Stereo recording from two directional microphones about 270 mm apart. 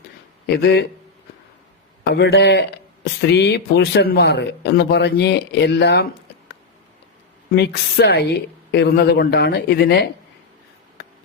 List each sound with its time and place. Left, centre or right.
0.4 s speech: left
2.0 s speech: left
7.5 s speech: left